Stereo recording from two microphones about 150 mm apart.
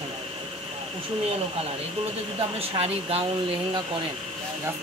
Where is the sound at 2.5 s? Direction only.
40° right (ahead or behind).